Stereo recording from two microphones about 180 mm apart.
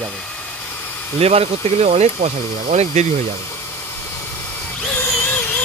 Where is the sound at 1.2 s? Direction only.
35° right (ahead or behind).